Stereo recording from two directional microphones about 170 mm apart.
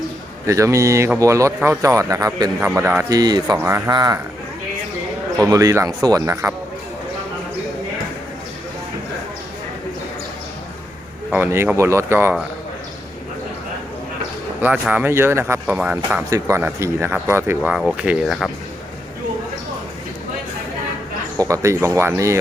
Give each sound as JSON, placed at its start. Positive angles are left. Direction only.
{"t": 0.4, "sound": "speech", "side_deg": -20}
{"t": 5.5, "sound": "speech", "side_deg": -20}
{"t": 11.3, "sound": "speech", "side_deg": -15}
{"t": 14.6, "sound": "speech", "side_deg": -10}
{"t": 21.3, "sound": "speech", "side_deg": -20}